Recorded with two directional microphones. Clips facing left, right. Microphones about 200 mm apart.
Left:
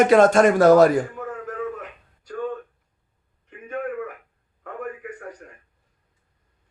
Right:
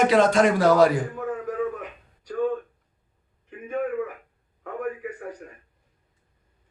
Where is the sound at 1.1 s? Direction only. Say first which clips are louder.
Right 3 dB; 5° right (ahead or behind).